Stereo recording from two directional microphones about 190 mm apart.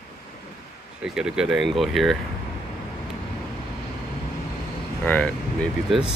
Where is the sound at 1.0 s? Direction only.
5° right (ahead or behind).